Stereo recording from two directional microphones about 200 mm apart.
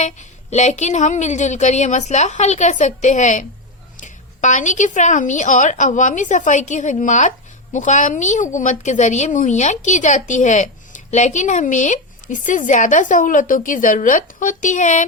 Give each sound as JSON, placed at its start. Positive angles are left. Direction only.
{"t": 0.0, "sound": "a woman's voice", "side_deg": 35}